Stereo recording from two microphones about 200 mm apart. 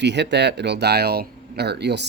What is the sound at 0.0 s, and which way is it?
Speech, 60° right (ahead or behind).